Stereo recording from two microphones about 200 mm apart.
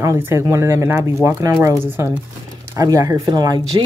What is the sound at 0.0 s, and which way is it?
Speech, 15° right (ahead or behind).